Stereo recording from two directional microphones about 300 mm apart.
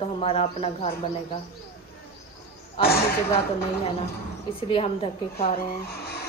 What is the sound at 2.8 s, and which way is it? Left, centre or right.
Speech, centre.